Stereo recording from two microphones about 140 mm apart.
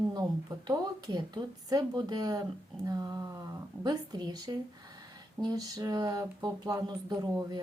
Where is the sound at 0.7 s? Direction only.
30° right (ahead or behind).